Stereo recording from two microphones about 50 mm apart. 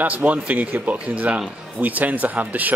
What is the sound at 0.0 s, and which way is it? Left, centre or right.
Speech, right.